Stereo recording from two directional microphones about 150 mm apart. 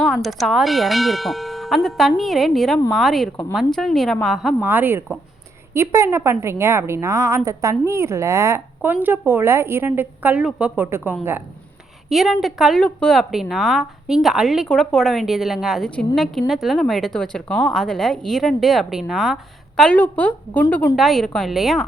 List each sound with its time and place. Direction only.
0.0 s a woman's voice: centre (ahead or behind)
4.6 s a woman's voice: 10° right (ahead or behind)
12.0 s a woman's voice: centre (ahead or behind)